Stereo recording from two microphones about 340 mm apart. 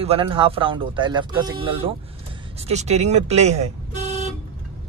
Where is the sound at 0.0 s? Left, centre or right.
Centre.